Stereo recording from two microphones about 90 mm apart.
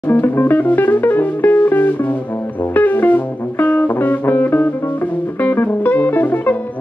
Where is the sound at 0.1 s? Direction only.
20° left (ahead or behind).